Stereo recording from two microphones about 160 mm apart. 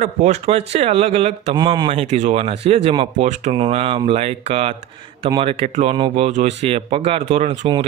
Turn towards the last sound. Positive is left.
turn(degrees=-35)  # may be behind; listen again after turning